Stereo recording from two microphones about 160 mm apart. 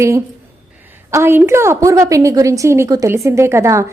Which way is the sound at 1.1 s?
15° right (ahead or behind).